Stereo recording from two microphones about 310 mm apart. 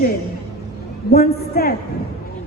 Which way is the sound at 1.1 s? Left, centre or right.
Left.